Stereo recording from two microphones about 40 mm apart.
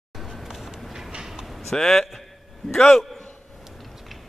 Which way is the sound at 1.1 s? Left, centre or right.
Centre.